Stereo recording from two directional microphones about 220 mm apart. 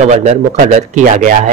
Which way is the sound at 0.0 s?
30° right (ahead or behind).